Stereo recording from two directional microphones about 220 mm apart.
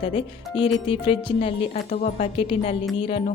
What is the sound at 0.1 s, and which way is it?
A woman's voice, 25° left (ahead or behind).